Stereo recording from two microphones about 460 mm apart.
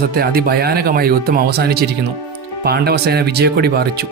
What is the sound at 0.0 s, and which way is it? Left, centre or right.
Speech, centre.